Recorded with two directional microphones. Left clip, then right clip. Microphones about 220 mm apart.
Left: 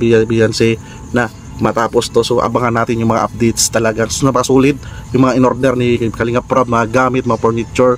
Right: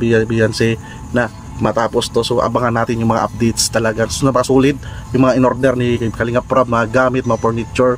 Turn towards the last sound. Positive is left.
turn(degrees=15)  # may be behind; listen again after turning